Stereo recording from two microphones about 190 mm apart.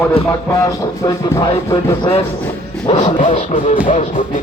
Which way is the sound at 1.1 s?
20° left (ahead or behind).